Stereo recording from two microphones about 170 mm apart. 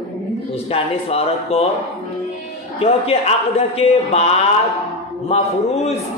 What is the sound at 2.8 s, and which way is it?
A man's voice, 35° left (ahead or behind).